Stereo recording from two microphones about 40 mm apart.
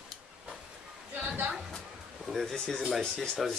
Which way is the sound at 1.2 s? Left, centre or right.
Right.